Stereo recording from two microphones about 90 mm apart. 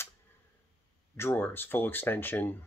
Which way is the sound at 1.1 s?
25° left (ahead or behind).